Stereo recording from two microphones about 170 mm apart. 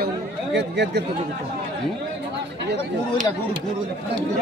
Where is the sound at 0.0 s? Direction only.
90° right.